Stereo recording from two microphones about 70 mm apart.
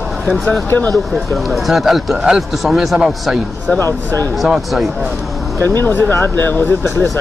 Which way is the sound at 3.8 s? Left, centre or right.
Left.